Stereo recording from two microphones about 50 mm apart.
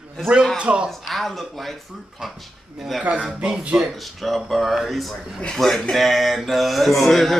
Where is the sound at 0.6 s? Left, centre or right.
Right.